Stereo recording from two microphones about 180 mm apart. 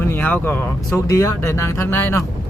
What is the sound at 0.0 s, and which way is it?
Speech, 15° left (ahead or behind).